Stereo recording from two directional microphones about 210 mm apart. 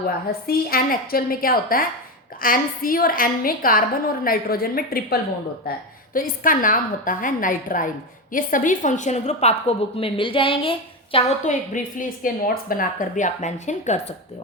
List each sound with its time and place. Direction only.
0.3 s a woman's voice: 45° left (ahead or behind)